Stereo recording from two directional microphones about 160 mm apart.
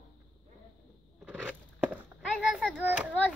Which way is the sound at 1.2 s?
10° right (ahead or behind).